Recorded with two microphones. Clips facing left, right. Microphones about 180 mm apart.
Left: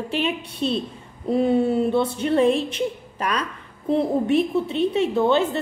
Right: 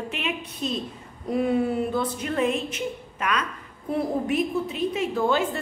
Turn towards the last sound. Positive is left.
turn(degrees=25)  # may be behind; listen again after turning